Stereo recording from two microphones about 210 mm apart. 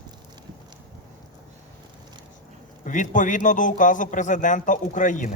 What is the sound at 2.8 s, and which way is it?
A man's voice, 35° left (ahead or behind).